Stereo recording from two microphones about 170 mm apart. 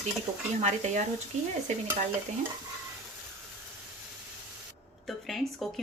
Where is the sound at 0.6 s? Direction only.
45° right (ahead or behind).